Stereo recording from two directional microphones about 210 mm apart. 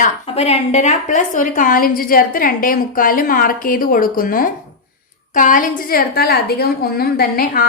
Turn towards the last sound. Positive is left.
turn(degrees=45)  # may be behind; listen again after turning